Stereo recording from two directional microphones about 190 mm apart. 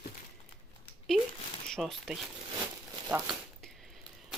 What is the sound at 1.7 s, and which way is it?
Speech, centre (ahead or behind).